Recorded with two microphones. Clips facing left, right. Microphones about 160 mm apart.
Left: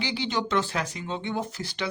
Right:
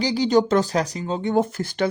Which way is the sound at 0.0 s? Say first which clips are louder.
Right 10 dB; 40° right (ahead or behind).